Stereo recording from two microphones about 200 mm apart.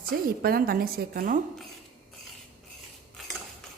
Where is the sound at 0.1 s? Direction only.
45° right (ahead or behind).